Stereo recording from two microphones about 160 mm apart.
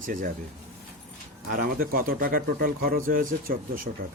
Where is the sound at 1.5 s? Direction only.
65° right (ahead or behind).